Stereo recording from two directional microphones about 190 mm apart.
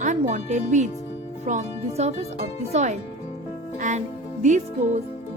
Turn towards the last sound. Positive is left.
turn(degrees=-40)  # may be behind; listen again after turning